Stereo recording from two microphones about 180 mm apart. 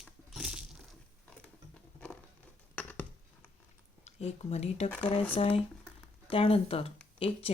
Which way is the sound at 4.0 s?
35° left (ahead or behind).